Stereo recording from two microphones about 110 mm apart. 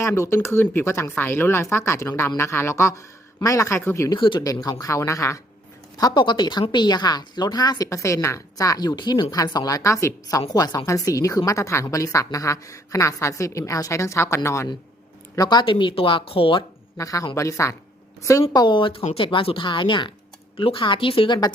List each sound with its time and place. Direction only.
0.0 s a woman's voice: 25° left (ahead or behind)
4.1 s a woman's voice: 45° left (ahead or behind); by 5.4 s 25° left (ahead or behind)
6.0 s a woman's voice: 40° left (ahead or behind)
15.4 s speech: 40° left (ahead or behind)
17.0 s a woman's voice: 30° left (ahead or behind)
18.5 s speech: 45° left (ahead or behind)